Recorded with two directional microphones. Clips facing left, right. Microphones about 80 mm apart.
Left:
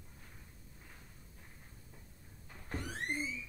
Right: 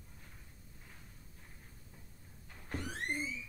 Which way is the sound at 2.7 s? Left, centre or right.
Centre.